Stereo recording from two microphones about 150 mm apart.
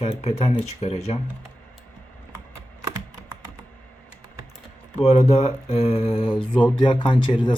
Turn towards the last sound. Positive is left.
turn(degrees=30)  # may be behind; listen again after turning